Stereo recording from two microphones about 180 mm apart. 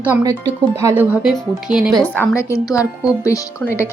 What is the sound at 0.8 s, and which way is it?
Speech, 15° right (ahead or behind).